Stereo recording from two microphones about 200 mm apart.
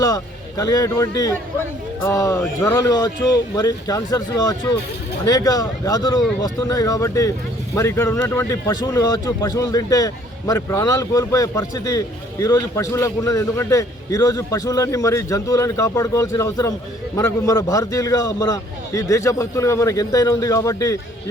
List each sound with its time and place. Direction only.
0.0 s a man's voice: 15° left (ahead or behind)